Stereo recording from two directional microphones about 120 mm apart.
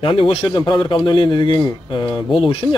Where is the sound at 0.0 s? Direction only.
45° left (ahead or behind).